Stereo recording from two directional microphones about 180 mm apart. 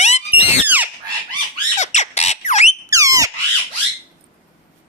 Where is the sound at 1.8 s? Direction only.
40° left (ahead or behind).